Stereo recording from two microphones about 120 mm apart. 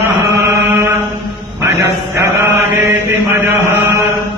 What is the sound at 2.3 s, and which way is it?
Chant, 20° right (ahead or behind).